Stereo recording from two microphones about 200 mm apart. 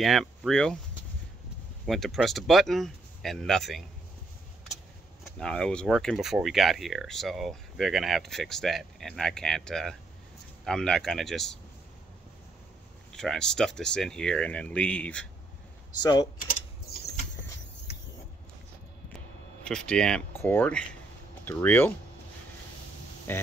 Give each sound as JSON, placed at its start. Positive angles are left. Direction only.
{"t": 0.0, "sound": "speech", "side_deg": 0}
{"t": 1.9, "sound": "speech", "side_deg": 0}
{"t": 5.2, "sound": "speech", "side_deg": 5}
{"t": 13.1, "sound": "speech", "side_deg": 0}
{"t": 16.0, "sound": "mechanisms", "side_deg": 20}
{"t": 19.1, "sound": "speech", "side_deg": 5}
{"t": 23.3, "sound": "speech", "side_deg": 10}